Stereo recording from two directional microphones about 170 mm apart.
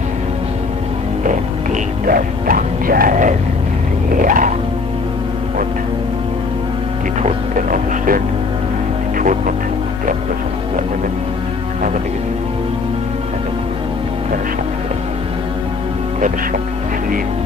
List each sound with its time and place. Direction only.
2.0 s music: 55° right (ahead or behind)
7.2 s music: 50° right (ahead or behind)